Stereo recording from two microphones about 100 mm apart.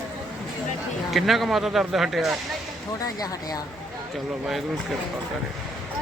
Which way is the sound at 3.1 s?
40° left (ahead or behind).